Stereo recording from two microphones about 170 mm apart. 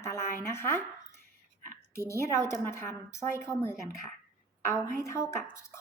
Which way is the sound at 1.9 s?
15° left (ahead or behind).